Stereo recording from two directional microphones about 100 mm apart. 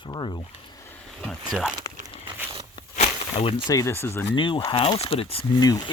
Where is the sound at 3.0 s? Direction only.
75° left (ahead or behind).